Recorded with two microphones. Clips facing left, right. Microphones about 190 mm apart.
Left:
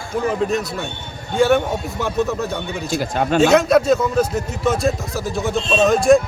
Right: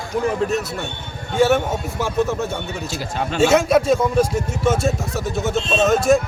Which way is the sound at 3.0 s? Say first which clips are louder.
Left 5 dB; 55° left (ahead or behind).